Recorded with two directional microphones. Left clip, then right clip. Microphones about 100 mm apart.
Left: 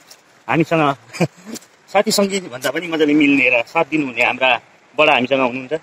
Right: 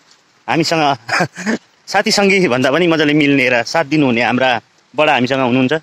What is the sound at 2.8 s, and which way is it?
A man's voice, 45° right (ahead or behind).